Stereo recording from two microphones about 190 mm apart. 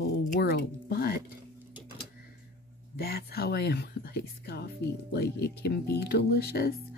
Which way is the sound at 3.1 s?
55° left (ahead or behind).